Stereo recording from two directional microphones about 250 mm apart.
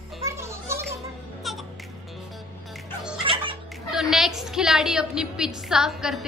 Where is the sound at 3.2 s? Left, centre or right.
Right.